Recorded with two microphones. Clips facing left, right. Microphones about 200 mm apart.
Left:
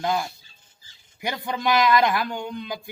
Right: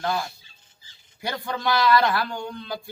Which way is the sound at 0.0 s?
15° left (ahead or behind).